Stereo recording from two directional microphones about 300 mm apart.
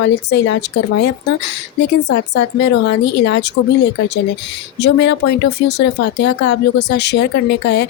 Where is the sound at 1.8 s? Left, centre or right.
Left.